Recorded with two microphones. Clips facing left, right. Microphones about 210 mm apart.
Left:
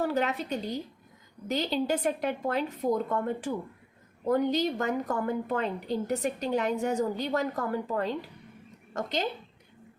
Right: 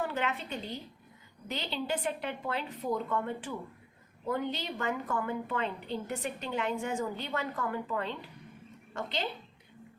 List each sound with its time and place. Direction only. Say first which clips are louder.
0.0 s a woman's voice: left 5 dB; 40° left (ahead or behind)